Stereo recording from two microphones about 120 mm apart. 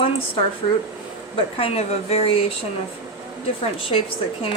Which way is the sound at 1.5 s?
55° left (ahead or behind).